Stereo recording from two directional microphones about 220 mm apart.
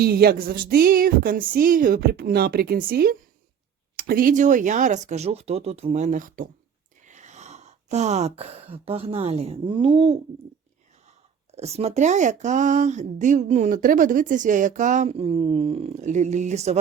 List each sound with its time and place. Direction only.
0.0 s a sound: 45° right (ahead or behind)
3.9 s speech: 40° right (ahead or behind); by 10.2 s 25° right (ahead or behind)
11.5 s speech: 30° right (ahead or behind)